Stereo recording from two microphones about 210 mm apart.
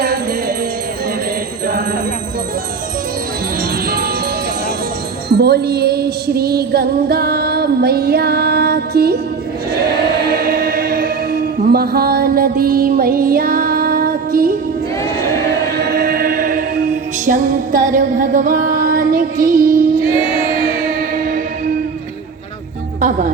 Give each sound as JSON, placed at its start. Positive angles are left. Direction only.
{"t": 0.0, "sound": "music", "side_deg": -50}
{"t": 3.8, "sound": "music", "side_deg": -45}
{"t": 5.3, "sound": "music", "side_deg": -50}
{"t": 9.7, "sound": "choir", "side_deg": -45}
{"t": 15.8, "sound": "choir", "side_deg": -50}
{"t": 17.2, "sound": "music", "side_deg": -40}